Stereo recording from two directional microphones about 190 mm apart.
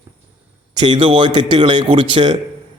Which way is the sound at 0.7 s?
25° right (ahead or behind).